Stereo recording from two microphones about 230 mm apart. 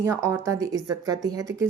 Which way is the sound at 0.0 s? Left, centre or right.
Centre.